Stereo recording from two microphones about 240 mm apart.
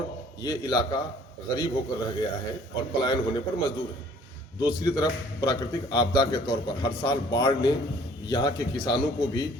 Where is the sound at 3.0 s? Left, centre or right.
Centre.